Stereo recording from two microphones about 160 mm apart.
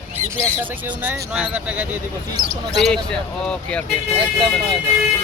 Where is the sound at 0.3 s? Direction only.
10° right (ahead or behind).